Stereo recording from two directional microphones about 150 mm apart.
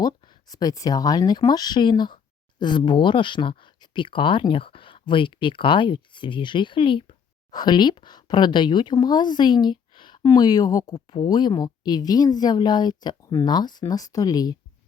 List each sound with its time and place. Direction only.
0.0 s speech: 25° left (ahead or behind)